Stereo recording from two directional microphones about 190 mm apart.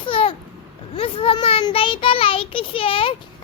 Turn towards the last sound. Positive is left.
turn(degrees=30)  # may be behind; listen again after turning